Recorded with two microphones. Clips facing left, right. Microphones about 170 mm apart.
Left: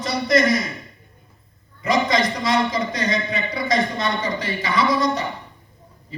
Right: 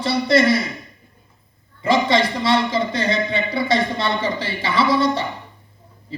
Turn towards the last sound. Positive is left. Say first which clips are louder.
# right 1 dB
turn(degrees=-30)  # may be behind; listen again after turning